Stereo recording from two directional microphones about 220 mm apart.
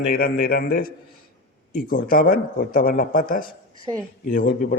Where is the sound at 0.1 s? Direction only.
40° left (ahead or behind).